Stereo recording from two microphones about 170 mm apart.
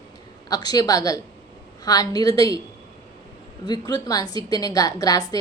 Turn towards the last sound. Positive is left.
turn(degrees=20)  # may be behind; listen again after turning